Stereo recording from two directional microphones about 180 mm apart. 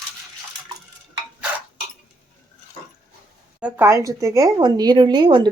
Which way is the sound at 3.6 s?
10° right (ahead or behind).